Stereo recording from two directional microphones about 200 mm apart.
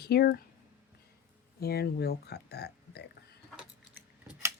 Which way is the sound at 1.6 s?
50° left (ahead or behind).